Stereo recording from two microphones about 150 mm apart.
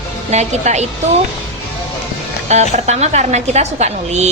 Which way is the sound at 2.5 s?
50° right (ahead or behind).